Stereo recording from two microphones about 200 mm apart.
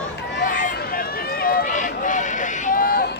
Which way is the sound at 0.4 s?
45° left (ahead or behind).